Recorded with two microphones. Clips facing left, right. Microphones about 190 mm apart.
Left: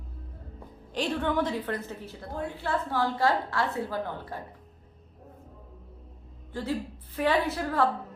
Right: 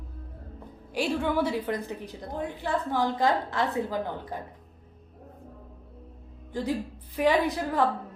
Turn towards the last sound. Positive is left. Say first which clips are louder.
# right 1 dB
turn(degrees=-15)  # may be behind; listen again after turning